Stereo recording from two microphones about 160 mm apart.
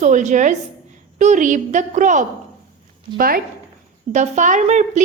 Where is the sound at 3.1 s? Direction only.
65° right (ahead or behind).